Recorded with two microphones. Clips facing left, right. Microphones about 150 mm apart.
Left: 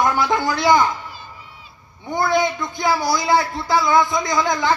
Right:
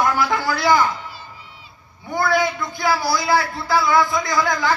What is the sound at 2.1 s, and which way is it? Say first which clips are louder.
Speech: left 1 dB; 20° left (ahead or behind).